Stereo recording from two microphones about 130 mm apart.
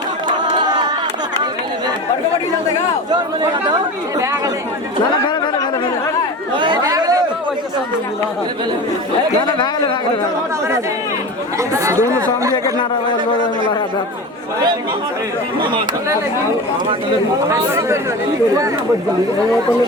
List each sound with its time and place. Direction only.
0.5 s a sound: 35° right (ahead or behind)
3.1 s speech: 35° right (ahead or behind)
5.3 s a sound: 35° left (ahead or behind)
6.5 s chatter: 35° right (ahead or behind)
9.5 s speech: 35° left (ahead or behind)
11.5 s speech: 25° right (ahead or behind)
17.5 s speech: 20° right (ahead or behind)